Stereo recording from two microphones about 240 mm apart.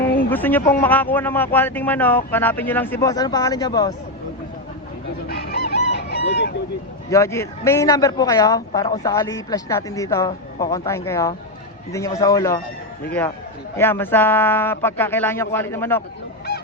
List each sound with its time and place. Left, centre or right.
0.3 s speech: centre
5.3 s chicken: left
7.1 s speech: centre